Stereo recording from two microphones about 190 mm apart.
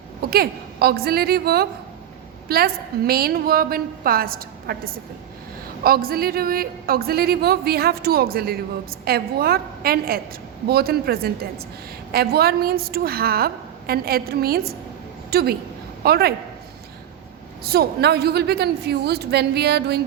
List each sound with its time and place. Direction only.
0.3 s a woman's voice: 55° right (ahead or behind)
17.6 s a woman's voice: 55° right (ahead or behind)